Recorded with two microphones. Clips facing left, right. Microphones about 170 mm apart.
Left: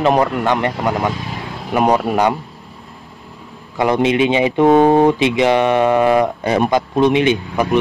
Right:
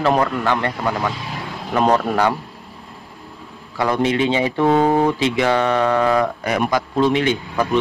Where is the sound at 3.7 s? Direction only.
20° left (ahead or behind).